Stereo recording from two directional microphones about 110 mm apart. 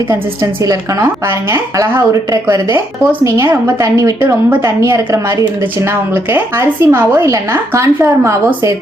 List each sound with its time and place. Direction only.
0.6 s a woman's voice: 30° right (ahead or behind)